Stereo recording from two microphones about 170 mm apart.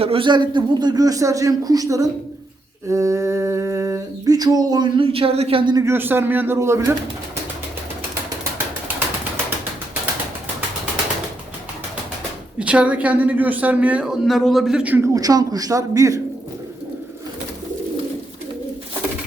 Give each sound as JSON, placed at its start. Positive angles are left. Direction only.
{"t": 0.0, "sound": "humming", "side_deg": -30}
{"t": 5.8, "sound": "a woman's voice", "side_deg": -15}
{"t": 12.5, "sound": "a woman's voice", "side_deg": -5}